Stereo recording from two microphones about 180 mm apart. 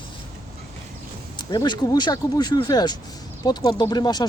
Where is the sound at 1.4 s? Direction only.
25° left (ahead or behind).